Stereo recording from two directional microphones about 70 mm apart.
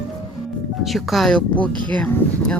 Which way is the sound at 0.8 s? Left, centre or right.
Centre.